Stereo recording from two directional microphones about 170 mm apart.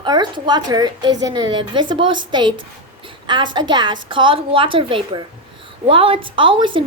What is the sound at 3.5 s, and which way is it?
A woman's voice, 25° right (ahead or behind).